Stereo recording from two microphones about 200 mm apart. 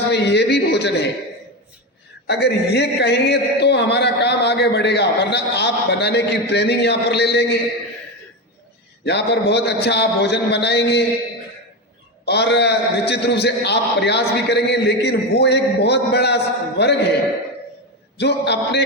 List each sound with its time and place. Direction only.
0.1 s a man's voice: 55° left (ahead or behind)
2.2 s a man's voice: 55° left (ahead or behind)
9.0 s a man's voice: 55° left (ahead or behind)
12.2 s a man's voice: 55° left (ahead or behind)
18.2 s a man's voice: 55° left (ahead or behind)